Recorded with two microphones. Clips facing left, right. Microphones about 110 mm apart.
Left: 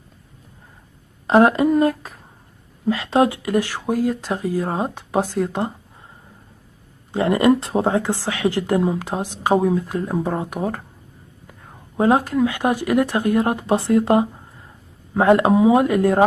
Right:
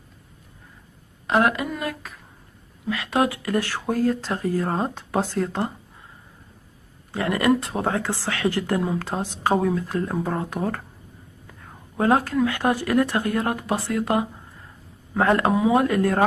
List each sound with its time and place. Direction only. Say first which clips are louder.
1.2 s speech: left 7 dB; 30° left (ahead or behind); by 5.7 s 15° left (ahead or behind)
7.1 s speech: left 5 dB; 25° left (ahead or behind)
12.0 s speech: left 3 dB; 15° left (ahead or behind)